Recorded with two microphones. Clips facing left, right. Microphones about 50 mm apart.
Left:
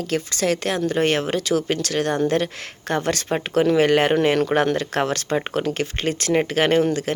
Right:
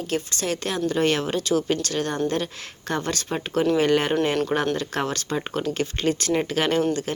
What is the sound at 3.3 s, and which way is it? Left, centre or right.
Speech, left.